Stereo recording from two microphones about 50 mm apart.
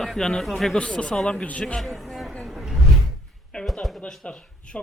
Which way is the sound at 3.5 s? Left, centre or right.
Left.